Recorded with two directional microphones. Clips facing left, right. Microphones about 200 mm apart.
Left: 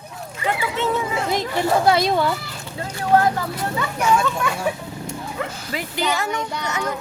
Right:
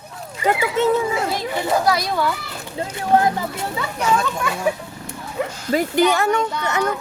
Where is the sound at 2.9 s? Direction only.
20° right (ahead or behind).